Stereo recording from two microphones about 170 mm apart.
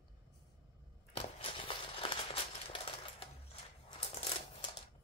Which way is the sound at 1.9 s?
35° left (ahead or behind).